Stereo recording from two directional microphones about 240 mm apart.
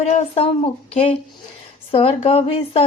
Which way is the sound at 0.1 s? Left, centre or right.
Left.